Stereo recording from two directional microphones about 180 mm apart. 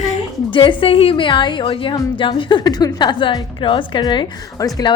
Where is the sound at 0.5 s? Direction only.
25° left (ahead or behind).